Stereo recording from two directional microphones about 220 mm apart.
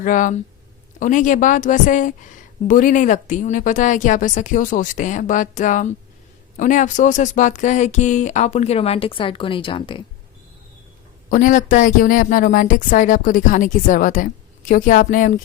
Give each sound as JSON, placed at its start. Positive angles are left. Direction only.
{"t": 0.0, "sound": "a woman's voice", "side_deg": 35}
{"t": 11.3, "sound": "a woman's voice", "side_deg": 35}